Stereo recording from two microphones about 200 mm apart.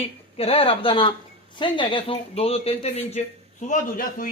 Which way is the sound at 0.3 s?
30° left (ahead or behind).